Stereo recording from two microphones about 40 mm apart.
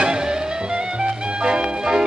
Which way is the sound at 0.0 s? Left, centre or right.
Centre.